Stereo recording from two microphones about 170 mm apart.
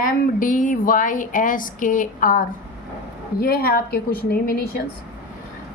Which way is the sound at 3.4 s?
60° left (ahead or behind).